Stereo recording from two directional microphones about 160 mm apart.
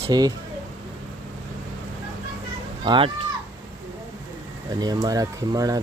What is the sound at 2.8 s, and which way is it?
Speech, 30° right (ahead or behind).